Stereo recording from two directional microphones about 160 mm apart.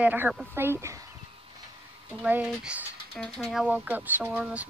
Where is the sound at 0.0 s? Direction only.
10° right (ahead or behind).